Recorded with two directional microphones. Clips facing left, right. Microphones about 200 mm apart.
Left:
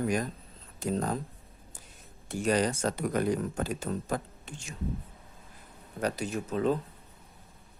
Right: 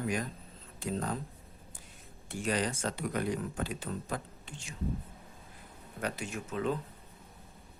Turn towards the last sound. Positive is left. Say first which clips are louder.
# left 5 dB
turn(degrees=35)  # may be behind; listen again after turning